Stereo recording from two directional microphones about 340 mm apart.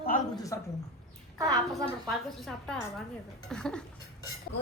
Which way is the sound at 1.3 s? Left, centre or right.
Centre.